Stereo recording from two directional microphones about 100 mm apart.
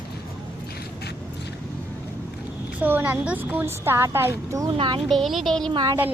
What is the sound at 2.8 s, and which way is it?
Speech, 20° right (ahead or behind).